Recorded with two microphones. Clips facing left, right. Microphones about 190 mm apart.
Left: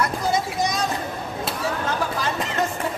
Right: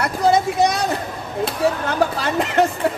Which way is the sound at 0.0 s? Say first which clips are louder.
Right 6 dB; 65° right (ahead or behind).